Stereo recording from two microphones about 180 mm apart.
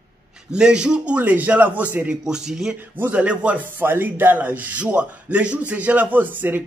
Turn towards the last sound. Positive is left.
turn(degrees=-10)  # may be behind; listen again after turning